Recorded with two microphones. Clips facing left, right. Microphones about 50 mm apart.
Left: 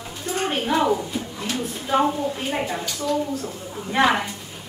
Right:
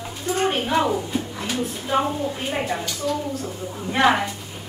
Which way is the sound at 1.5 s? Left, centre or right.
Centre.